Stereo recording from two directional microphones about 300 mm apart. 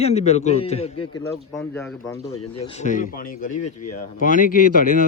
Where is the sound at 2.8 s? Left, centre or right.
Left.